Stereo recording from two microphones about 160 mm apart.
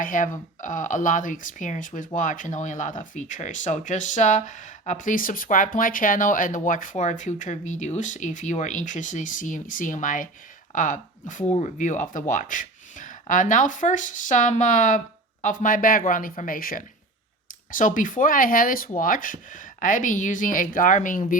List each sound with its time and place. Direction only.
0.0 s speech: 55° left (ahead or behind)